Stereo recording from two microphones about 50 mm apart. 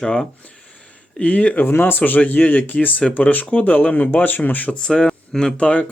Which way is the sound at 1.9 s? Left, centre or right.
Left.